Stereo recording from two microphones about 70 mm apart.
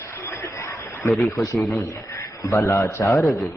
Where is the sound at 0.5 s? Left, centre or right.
Left.